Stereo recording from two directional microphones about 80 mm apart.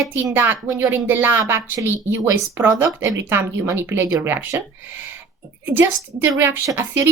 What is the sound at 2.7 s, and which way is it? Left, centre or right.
A woman's voice, right.